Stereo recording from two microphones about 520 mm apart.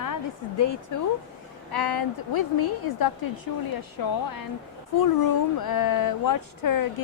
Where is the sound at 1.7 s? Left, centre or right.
Left.